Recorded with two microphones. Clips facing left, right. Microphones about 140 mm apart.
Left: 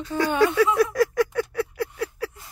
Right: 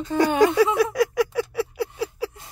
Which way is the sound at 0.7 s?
Centre (ahead or behind).